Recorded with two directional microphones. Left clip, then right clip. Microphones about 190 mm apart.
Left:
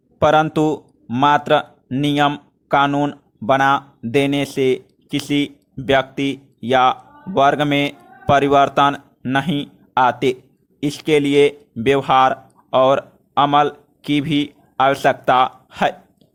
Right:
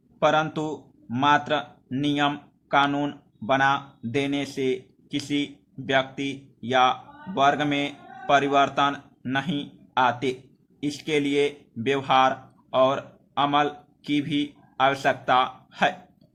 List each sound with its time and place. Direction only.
0.2 s a man's voice: 45° left (ahead or behind)